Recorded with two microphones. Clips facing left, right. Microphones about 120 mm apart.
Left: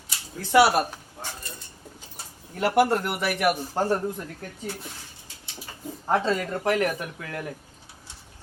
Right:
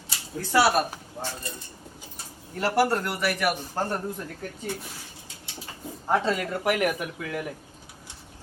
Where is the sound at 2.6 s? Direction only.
20° left (ahead or behind).